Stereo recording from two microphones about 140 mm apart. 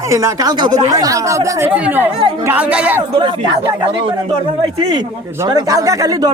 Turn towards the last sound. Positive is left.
turn(degrees=-25)  # may be behind; listen again after turning